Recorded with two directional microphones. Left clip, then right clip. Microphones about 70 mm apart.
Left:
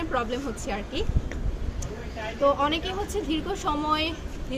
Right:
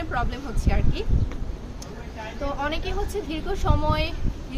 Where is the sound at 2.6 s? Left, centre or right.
Right.